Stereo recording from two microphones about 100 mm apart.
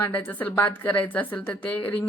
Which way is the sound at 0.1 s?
15° left (ahead or behind).